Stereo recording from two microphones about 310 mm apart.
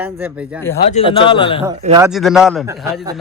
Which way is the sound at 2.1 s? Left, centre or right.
Centre.